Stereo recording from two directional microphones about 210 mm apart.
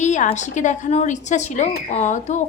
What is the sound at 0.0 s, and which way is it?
Speech, 35° left (ahead or behind).